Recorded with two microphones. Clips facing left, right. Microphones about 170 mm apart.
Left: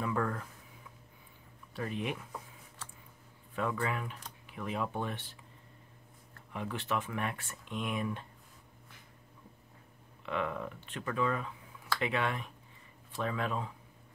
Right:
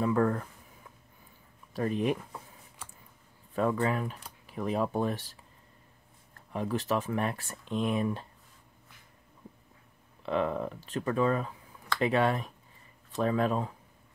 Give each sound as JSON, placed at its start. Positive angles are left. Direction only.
{"t": 0.0, "sound": "speech", "side_deg": -35}
{"t": 1.7, "sound": "speech", "side_deg": -40}
{"t": 3.8, "sound": "speech", "side_deg": -40}
{"t": 6.5, "sound": "speech", "side_deg": -35}
{"t": 10.2, "sound": "speech", "side_deg": -35}